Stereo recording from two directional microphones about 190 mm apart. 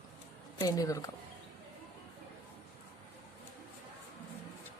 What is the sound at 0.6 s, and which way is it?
Speech, 20° left (ahead or behind).